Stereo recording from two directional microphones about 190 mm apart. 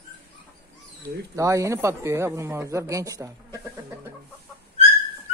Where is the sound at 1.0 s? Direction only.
15° right (ahead or behind).